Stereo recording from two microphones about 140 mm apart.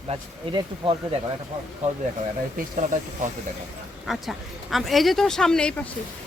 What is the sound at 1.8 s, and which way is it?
Speech, 55° right (ahead or behind).